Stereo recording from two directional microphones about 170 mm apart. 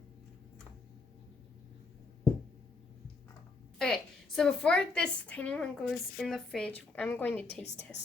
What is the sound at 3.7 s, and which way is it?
A woman's voice, 5° left (ahead or behind).